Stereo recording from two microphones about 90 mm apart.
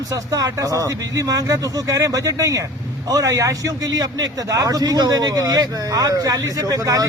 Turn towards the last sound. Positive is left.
turn(degrees=-40)  # may be behind; listen again after turning